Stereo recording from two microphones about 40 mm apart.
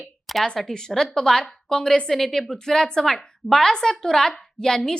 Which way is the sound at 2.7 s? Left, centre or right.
Centre.